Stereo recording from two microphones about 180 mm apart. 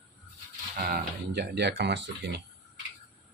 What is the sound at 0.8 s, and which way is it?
Speech, 55° right (ahead or behind).